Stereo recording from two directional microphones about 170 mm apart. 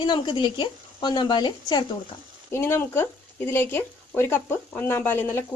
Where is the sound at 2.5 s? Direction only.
15° left (ahead or behind).